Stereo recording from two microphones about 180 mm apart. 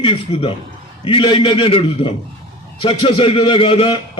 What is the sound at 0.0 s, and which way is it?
A man's voice, 30° left (ahead or behind).